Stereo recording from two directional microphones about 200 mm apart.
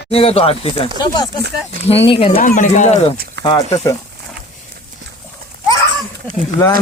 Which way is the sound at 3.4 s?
60° right (ahead or behind).